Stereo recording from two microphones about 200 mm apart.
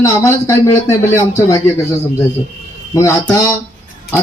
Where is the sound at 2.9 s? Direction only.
15° left (ahead or behind).